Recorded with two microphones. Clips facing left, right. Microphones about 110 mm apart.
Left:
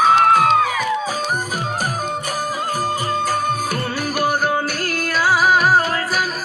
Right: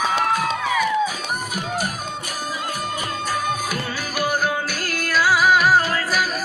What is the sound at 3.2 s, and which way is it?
Music, 50° left (ahead or behind).